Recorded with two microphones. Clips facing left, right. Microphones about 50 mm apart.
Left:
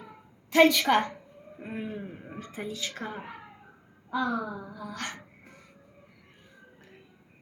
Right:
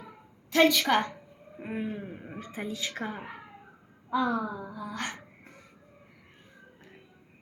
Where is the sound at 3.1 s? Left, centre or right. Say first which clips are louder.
Even; centre.